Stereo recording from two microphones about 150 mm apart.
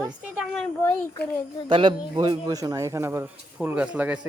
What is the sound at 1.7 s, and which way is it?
A man's voice, 35° right (ahead or behind).